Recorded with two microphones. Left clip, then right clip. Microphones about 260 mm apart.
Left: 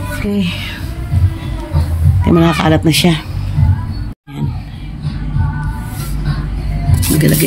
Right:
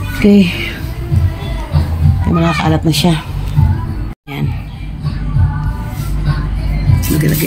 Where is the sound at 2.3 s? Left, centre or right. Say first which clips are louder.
Left 3 dB; centre.